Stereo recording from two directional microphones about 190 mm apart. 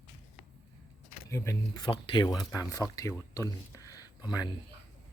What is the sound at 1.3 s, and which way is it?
Speech, 15° left (ahead or behind).